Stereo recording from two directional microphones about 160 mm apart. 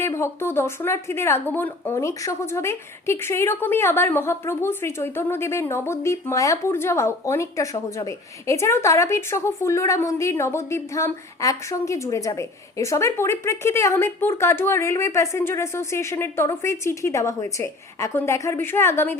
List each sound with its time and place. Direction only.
0.0 s a woman's voice: 15° left (ahead or behind)